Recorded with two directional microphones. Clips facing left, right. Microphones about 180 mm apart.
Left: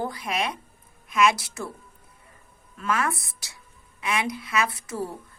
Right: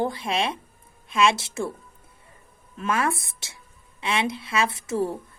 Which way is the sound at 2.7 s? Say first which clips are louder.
Right 2 dB; 25° right (ahead or behind).